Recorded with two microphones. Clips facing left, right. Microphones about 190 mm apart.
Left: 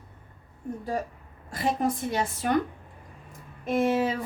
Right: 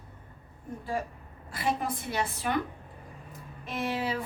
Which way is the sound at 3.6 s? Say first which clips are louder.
Left 8 dB; 50° left (ahead or behind).